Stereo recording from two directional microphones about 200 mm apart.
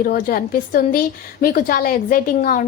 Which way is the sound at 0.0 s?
45° left (ahead or behind).